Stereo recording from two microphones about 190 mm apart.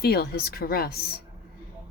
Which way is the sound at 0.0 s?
55° left (ahead or behind).